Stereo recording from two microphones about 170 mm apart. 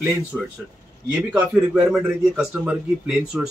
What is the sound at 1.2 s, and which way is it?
A man's voice, 10° right (ahead or behind).